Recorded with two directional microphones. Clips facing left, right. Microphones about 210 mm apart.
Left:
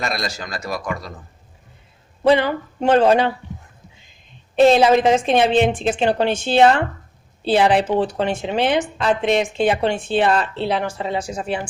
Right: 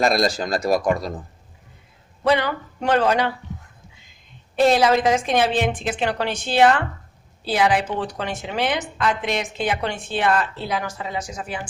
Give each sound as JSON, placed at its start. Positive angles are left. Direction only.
{"t": 0.0, "sound": "a man's voice", "side_deg": -40}
{"t": 2.2, "sound": "a woman's voice", "side_deg": 25}
{"t": 4.5, "sound": "a woman's voice", "side_deg": 25}